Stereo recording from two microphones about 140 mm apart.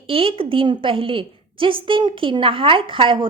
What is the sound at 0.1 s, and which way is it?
A woman's voice, 40° right (ahead or behind).